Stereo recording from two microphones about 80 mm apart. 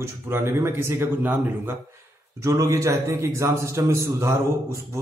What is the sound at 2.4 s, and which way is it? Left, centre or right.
A man's voice, right.